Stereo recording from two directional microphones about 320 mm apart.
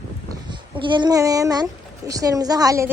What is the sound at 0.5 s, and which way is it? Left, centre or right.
A child's voice, centre.